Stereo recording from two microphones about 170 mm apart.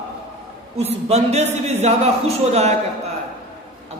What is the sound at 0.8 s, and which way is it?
Speech, 40° right (ahead or behind).